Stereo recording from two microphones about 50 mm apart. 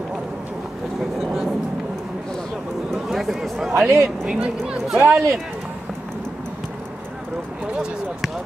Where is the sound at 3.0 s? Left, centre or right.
Centre.